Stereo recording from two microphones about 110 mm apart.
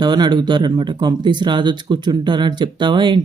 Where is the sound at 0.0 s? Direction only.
40° right (ahead or behind).